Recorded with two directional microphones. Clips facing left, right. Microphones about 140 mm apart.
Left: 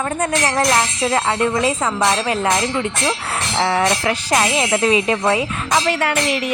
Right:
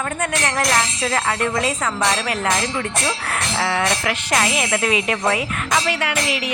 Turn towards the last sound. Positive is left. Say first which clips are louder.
# left 4 dB
turn(degrees=45)  # may be behind; listen again after turning